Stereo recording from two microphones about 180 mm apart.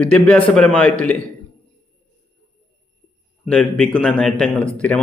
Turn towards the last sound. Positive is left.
turn(degrees=5)  # may be behind; listen again after turning